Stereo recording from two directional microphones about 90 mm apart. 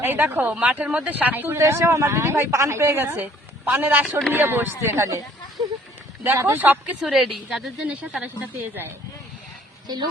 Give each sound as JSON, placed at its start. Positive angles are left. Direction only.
{"t": 0.0, "sound": "speech", "side_deg": -20}
{"t": 5.6, "sound": "a sound", "side_deg": -45}
{"t": 6.2, "sound": "speech", "side_deg": -25}
{"t": 7.1, "sound": "a woman's voice", "side_deg": 0}
{"t": 7.9, "sound": "speech", "side_deg": -15}
{"t": 9.8, "sound": "speech", "side_deg": -50}